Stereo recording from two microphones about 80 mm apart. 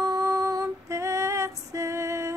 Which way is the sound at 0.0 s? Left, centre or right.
Right.